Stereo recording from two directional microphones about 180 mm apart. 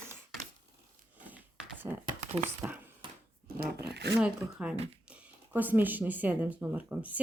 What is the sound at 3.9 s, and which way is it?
Speech, 70° right (ahead or behind).